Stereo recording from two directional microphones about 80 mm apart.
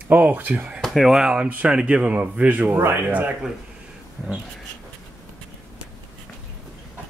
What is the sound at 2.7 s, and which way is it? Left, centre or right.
Speech, right.